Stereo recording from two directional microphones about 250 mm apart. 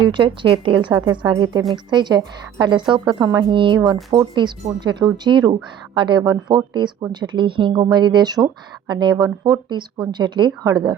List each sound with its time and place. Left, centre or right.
0.1 s speech: centre